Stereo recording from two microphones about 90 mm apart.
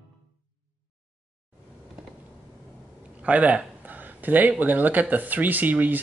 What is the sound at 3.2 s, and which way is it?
Speech, 15° right (ahead or behind).